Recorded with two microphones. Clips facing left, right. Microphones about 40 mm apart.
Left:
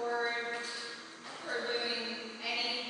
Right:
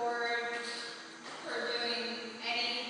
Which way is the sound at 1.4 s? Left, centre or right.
Centre.